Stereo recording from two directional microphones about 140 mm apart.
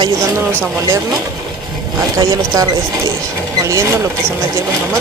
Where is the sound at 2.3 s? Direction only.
25° right (ahead or behind).